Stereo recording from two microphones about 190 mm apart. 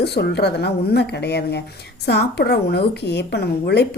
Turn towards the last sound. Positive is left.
turn(degrees=60)  # may be behind; listen again after turning